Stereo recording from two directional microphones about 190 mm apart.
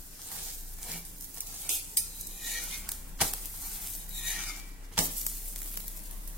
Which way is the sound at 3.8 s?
Centre (ahead or behind).